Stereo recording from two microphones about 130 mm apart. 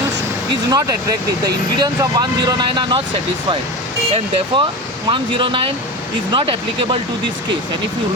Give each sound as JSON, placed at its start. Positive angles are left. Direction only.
{"t": 0.7, "sound": "speech", "side_deg": -25}
{"t": 4.5, "sound": "speech", "side_deg": -35}